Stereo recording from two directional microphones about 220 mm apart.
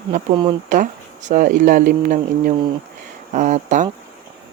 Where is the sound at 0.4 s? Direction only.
35° right (ahead or behind).